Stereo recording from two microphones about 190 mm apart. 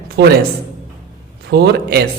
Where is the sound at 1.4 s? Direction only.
60° right (ahead or behind).